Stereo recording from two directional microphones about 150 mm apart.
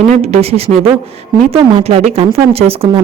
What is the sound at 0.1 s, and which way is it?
Speech, 45° right (ahead or behind).